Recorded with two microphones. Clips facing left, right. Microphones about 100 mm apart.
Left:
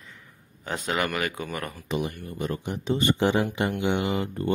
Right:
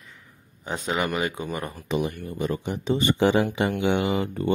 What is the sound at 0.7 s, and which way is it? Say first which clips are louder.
Speech: right 1 dB; centre (ahead or behind).